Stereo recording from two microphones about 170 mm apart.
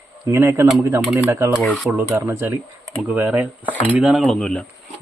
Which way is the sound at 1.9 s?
10° right (ahead or behind).